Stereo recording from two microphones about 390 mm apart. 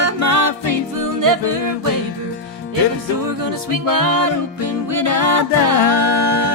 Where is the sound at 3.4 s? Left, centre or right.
Right.